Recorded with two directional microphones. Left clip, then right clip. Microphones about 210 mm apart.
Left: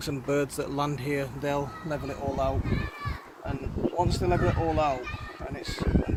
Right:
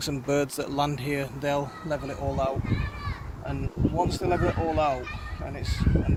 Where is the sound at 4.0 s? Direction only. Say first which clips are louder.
Right 1 dB; centre (ahead or behind).